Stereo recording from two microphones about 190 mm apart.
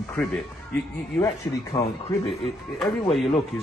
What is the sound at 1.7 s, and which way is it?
Speech, 20° left (ahead or behind).